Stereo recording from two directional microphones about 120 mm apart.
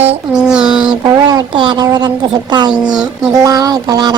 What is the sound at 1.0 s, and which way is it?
Speech, 35° right (ahead or behind).